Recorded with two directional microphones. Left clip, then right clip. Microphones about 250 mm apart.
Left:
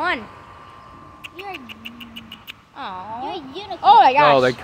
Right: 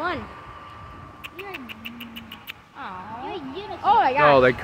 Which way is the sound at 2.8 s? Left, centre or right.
Left.